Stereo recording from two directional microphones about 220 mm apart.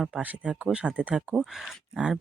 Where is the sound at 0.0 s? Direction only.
5° right (ahead or behind).